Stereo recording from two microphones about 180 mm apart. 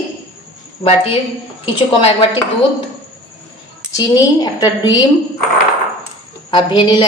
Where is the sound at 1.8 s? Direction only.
30° left (ahead or behind).